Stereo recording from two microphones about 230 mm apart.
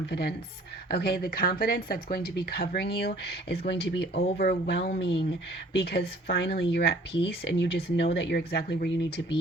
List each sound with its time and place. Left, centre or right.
0.1 s speech: left